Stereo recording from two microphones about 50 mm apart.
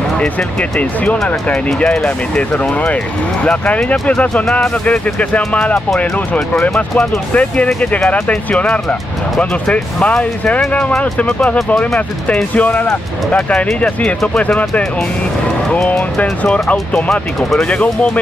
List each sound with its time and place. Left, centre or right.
0.2 s speech: centre
7.3 s speech: left
11.0 s speech: left
12.5 s speech: left
15.9 s speech: left
17.1 s speech: centre
17.6 s speech: left